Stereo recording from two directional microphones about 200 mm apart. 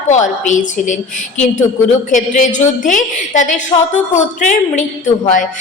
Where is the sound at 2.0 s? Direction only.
40° left (ahead or behind).